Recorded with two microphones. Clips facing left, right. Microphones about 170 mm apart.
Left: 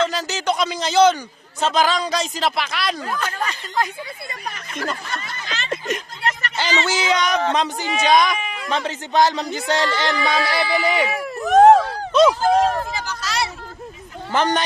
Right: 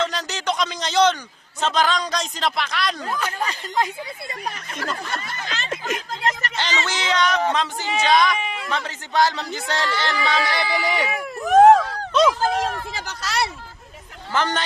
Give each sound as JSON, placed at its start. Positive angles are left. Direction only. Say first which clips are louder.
{"t": 0.0, "sound": "a sound", "louder": "left 3 dB", "side_deg": 5}
{"t": 1.6, "sound": "speech", "louder": "left 2 dB", "side_deg": 10}
{"t": 3.1, "sound": "speech", "louder": "left 1 dB", "side_deg": -15}
{"t": 6.6, "sound": "speech", "louder": "left 8 dB", "side_deg": 10}
{"t": 8.4, "sound": "a sound", "louder": "right 1 dB", "side_deg": -25}
{"t": 8.7, "sound": "speech", "louder": "left 4 dB", "side_deg": 20}
{"t": 12.3, "sound": "speech", "louder": "left 5 dB", "side_deg": 40}
{"t": 13.1, "sound": "speech", "louder": "even", "side_deg": -60}
{"t": 14.3, "sound": "speech", "louder": "left 4 dB", "side_deg": 15}